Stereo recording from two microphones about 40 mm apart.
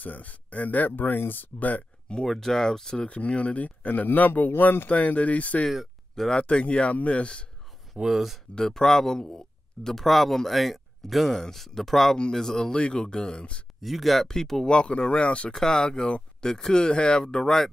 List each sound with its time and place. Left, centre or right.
0.0 s speech: left
2.2 s speech: centre
3.1 s speech: left
4.8 s speech: left
5.7 s a sound: centre
6.5 s speech: left
8.0 s speech: centre
8.5 s speech: centre
12.7 s speech: left
13.7 s speech: centre
14.2 s speech: centre
14.7 s speech: left
15.5 s speech: centre